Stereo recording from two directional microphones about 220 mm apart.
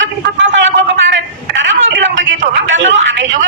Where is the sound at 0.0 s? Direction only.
60° right (ahead or behind).